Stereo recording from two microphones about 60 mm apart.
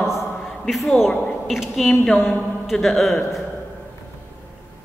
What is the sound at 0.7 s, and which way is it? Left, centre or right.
A woman's voice, centre.